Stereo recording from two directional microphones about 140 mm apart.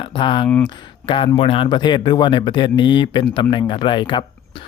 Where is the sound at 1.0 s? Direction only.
40° left (ahead or behind).